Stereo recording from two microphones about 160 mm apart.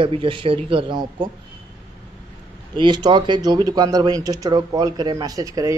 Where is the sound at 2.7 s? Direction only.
30° right (ahead or behind).